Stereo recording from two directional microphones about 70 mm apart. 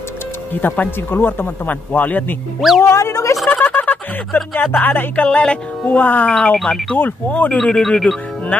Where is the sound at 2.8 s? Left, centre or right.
Left.